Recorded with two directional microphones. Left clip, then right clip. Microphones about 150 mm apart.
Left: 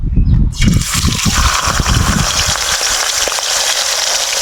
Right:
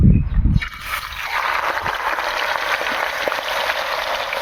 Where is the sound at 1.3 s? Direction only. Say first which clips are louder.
Left 3 dB; 70° left (ahead or behind).